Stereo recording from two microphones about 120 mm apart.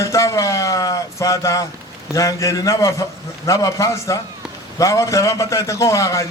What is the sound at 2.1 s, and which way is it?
A man's voice, 25° left (ahead or behind).